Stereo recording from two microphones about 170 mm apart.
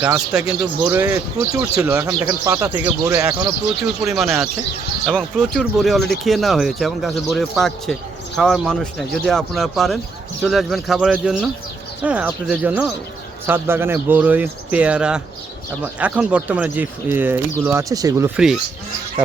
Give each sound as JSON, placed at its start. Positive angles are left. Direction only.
{"t": 0.0, "sound": "speech", "side_deg": -5}
{"t": 4.0, "sound": "speech", "side_deg": 0}